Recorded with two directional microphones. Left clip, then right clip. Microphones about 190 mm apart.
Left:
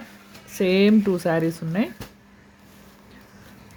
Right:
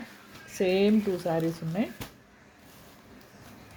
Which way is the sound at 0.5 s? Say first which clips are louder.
Left 5 dB; 25° left (ahead or behind).